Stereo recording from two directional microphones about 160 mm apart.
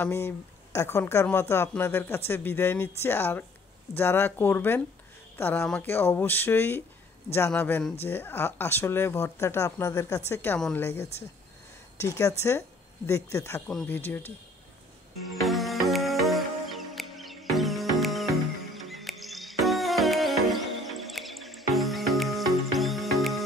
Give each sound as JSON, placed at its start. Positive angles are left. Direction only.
{"t": 0.0, "sound": "speech", "side_deg": 15}
{"t": 15.2, "sound": "music", "side_deg": 0}